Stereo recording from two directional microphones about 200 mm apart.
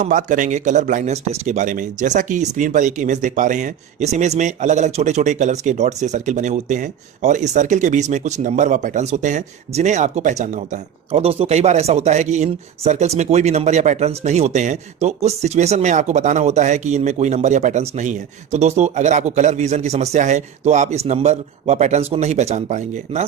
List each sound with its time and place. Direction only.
0.0 s speech: 40° right (ahead or behind)